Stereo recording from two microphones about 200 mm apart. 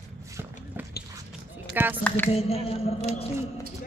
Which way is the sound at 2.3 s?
30° left (ahead or behind).